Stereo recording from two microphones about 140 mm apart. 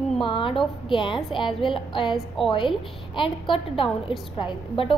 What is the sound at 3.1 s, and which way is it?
A woman's voice, 40° left (ahead or behind).